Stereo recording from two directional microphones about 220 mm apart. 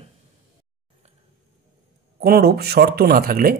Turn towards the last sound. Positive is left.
turn(degrees=-40)  # may be behind; listen again after turning